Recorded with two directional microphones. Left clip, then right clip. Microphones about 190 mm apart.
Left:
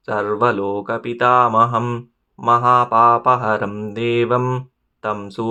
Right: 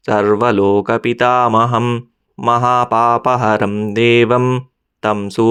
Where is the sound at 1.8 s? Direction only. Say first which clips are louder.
Right 6 dB; 30° right (ahead or behind).